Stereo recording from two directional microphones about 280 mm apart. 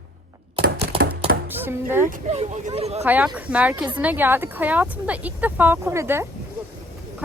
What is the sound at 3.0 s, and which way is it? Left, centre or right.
Speech, centre.